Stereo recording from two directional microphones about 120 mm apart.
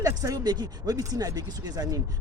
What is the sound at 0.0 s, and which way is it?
Speech, 30° right (ahead or behind).